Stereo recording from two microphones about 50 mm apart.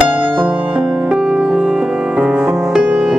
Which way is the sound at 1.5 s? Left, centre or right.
Centre.